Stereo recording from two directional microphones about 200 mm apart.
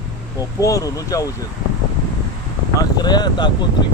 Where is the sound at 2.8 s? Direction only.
20° left (ahead or behind).